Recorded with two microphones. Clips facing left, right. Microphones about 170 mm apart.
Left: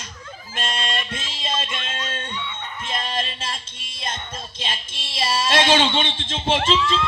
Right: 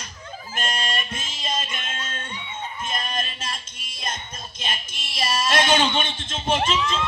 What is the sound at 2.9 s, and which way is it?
Music, 25° left (ahead or behind).